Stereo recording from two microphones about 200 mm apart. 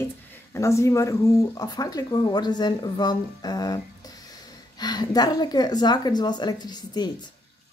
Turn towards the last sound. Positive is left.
turn(degrees=20)  # may be behind; listen again after turning